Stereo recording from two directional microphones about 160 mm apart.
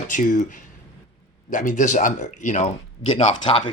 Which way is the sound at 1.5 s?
55° left (ahead or behind).